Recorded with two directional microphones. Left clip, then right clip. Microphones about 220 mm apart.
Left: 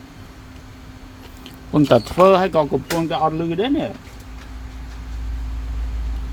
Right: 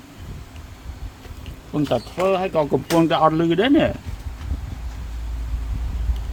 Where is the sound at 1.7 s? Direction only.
30° left (ahead or behind).